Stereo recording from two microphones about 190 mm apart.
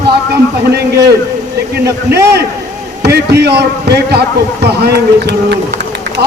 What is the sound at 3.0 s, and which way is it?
A man's voice, 60° right (ahead or behind).